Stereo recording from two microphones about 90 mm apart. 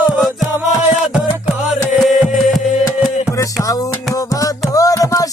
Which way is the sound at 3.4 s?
40° left (ahead or behind).